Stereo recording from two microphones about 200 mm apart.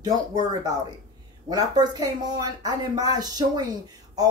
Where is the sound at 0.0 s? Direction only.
20° right (ahead or behind).